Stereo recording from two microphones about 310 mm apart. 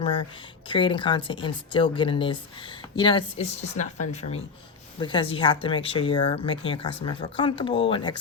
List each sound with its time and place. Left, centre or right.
0.7 s a woman's voice: centre